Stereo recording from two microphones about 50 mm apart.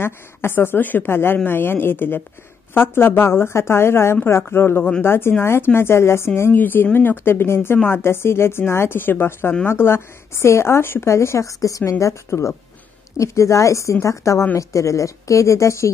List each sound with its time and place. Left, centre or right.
0.0 s a woman's voice: left
6.5 s a woman's voice: left
11.1 s a woman's voice: left
13.2 s a woman's voice: left